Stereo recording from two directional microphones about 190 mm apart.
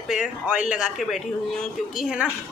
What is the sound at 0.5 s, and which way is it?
A woman's voice, 5° right (ahead or behind).